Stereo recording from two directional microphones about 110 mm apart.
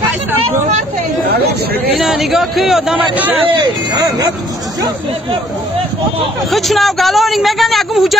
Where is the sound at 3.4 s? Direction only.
40° right (ahead or behind).